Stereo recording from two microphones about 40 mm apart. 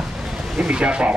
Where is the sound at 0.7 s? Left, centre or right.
Right.